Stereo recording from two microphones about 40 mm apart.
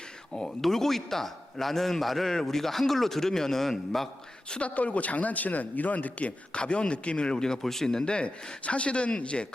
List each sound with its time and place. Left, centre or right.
0.3 s a man's voice: centre
4.5 s speech: left